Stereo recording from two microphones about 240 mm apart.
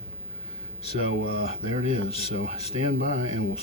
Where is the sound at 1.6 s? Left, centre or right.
Left.